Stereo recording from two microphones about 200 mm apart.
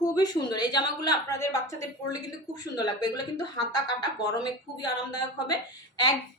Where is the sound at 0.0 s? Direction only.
20° left (ahead or behind).